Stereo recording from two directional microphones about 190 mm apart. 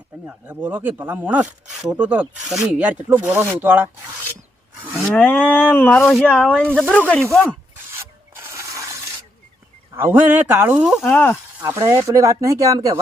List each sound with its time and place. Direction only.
0.3 s speech: 5° right (ahead or behind)
4.9 s speech: 5° left (ahead or behind)
7.9 s a sound: 15° right (ahead or behind)
9.9 s speech: 10° right (ahead or behind)
11.0 s speech: 10° left (ahead or behind)
11.6 s speech: 15° right (ahead or behind)